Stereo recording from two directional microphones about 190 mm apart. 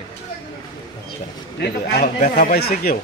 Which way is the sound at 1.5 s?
60° left (ahead or behind).